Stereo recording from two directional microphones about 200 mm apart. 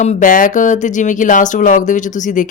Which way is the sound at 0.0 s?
40° left (ahead or behind).